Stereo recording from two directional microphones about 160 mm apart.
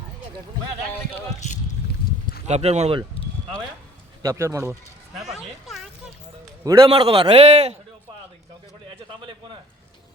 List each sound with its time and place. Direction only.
2.5 s a man's voice: 45° right (ahead or behind)
4.2 s speech: 20° right (ahead or behind)
5.1 s a sound: centre (ahead or behind)
6.7 s a man's voice: 35° right (ahead or behind)